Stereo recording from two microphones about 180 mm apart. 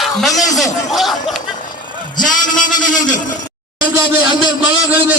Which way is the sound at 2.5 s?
45° left (ahead or behind).